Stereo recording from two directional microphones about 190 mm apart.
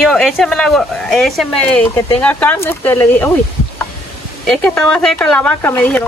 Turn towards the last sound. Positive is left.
turn(degrees=10)  # may be behind; listen again after turning